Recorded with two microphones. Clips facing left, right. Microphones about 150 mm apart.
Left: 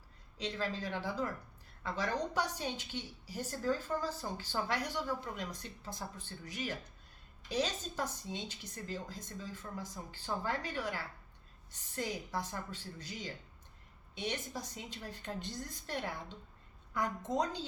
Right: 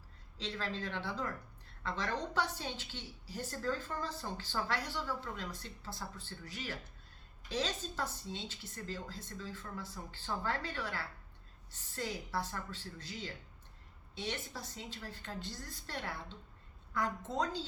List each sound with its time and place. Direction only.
0.3 s a woman's voice: 15° left (ahead or behind)